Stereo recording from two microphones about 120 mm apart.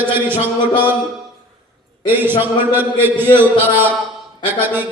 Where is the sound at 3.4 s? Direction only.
15° right (ahead or behind).